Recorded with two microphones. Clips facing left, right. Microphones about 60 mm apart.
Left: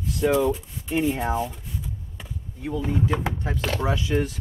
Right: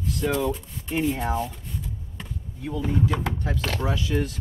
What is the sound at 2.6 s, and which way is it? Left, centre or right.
Speech, left.